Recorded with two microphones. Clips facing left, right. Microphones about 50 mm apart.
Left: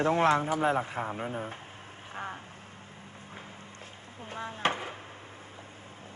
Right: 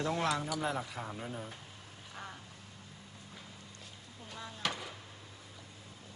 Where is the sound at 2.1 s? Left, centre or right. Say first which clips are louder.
Left 8 dB; left.